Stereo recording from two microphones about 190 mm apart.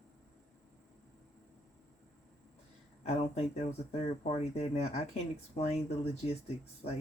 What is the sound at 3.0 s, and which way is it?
Speech, 35° left (ahead or behind).